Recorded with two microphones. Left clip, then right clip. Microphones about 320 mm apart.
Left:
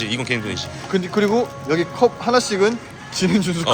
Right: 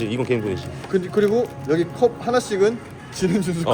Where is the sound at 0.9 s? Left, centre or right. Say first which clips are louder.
Even; left.